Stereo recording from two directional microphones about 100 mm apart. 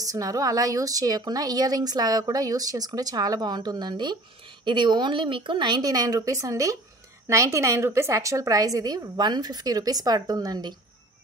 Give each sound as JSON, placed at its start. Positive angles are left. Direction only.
{"t": 0.1, "sound": "a woman's voice", "side_deg": -35}